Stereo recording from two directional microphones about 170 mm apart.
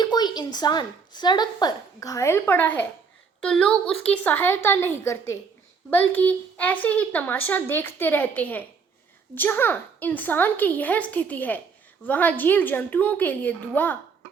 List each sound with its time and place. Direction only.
0.0 s a woman's voice: 25° left (ahead or behind)